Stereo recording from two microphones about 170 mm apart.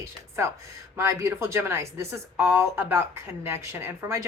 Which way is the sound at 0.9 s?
15° right (ahead or behind).